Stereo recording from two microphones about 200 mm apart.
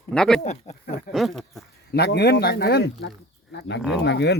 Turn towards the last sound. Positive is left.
turn(degrees=55)  # may be behind; listen again after turning